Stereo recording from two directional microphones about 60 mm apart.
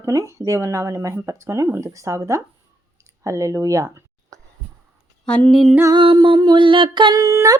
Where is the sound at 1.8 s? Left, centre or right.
Right.